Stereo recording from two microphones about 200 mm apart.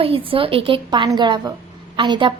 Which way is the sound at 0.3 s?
25° right (ahead or behind).